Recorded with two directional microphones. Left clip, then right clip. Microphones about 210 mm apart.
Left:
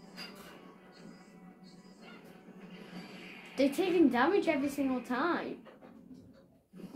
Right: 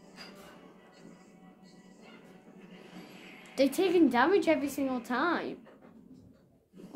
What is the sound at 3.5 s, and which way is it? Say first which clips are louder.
A woman's voice: right 3 dB; 40° right (ahead or behind).